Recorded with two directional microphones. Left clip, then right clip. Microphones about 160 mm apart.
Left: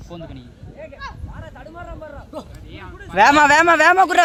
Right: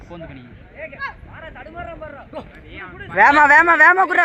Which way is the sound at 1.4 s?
60° left (ahead or behind).